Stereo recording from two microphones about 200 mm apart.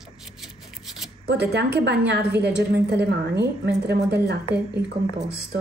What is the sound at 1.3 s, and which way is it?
A woman's voice, 55° right (ahead or behind).